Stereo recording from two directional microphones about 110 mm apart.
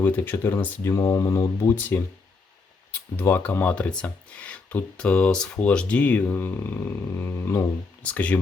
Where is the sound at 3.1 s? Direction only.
20° left (ahead or behind).